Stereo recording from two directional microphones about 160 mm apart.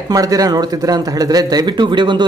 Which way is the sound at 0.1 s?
20° right (ahead or behind).